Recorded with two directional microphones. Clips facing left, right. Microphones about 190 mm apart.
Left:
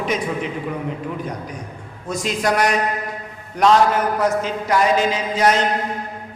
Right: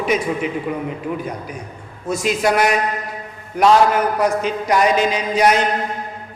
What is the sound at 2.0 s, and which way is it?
A woman's voice, 5° right (ahead or behind).